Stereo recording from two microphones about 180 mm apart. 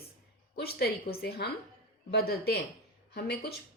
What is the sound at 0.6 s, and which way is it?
A woman's voice, 60° left (ahead or behind).